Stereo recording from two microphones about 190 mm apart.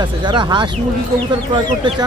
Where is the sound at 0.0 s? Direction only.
25° right (ahead or behind).